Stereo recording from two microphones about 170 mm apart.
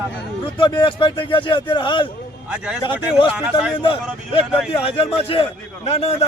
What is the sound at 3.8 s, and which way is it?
Speech, 30° left (ahead or behind).